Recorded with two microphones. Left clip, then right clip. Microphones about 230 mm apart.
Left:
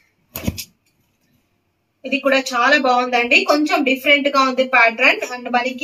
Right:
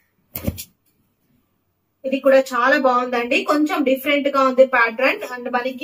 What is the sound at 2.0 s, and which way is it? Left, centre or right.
A woman's voice, centre.